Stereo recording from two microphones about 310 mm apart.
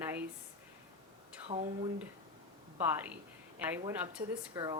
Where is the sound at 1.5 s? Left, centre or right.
Centre.